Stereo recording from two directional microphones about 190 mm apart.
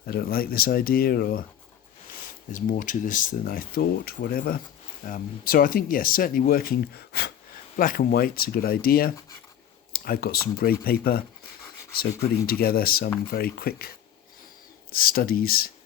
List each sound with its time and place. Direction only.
0.0 s speech: 50° left (ahead or behind)
2.5 s speech: 45° left (ahead or behind)
12.5 s speech: 50° left (ahead or behind)